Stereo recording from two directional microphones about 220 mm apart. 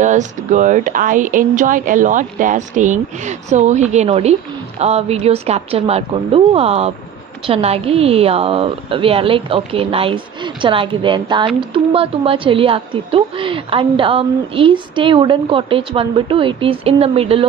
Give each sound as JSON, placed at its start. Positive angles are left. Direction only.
{"t": 0.0, "sound": "a woman's voice", "side_deg": -35}